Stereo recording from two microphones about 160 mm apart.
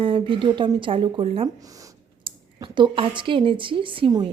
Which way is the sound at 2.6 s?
30° right (ahead or behind).